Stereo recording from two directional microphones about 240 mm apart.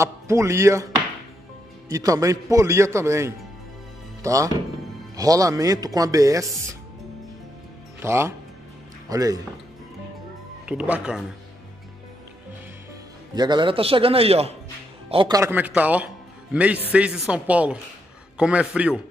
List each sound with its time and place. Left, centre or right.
0.0 s a man's voice: centre
1.9 s a man's voice: centre
8.0 s a man's voice: centre
10.6 s speech: centre
13.3 s a man's voice: centre